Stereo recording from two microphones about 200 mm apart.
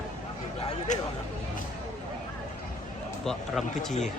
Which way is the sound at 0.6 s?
35° left (ahead or behind).